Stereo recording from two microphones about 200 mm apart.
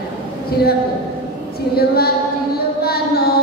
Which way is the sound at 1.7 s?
50° left (ahead or behind).